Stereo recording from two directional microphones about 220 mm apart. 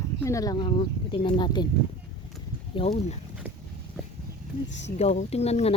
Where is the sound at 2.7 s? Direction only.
30° left (ahead or behind).